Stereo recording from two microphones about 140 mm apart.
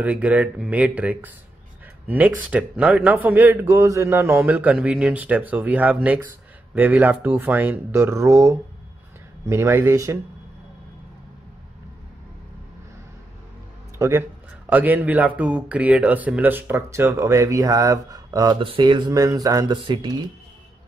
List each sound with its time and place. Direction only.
0.0 s speech: 10° right (ahead or behind)
13.9 s speech: 20° right (ahead or behind)
18.6 s speech: 35° right (ahead or behind)